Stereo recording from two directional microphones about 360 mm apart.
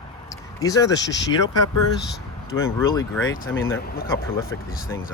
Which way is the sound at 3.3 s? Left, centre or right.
Left.